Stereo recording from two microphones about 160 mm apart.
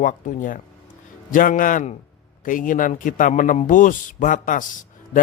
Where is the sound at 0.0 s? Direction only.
55° left (ahead or behind).